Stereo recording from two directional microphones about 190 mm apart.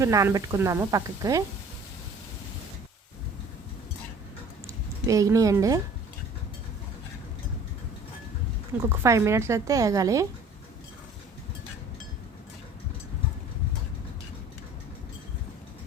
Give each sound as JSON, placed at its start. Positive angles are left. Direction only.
{"t": 0.0, "sound": "speech", "side_deg": -15}
{"t": 4.6, "sound": "speech", "side_deg": -15}
{"t": 8.8, "sound": "speech", "side_deg": -15}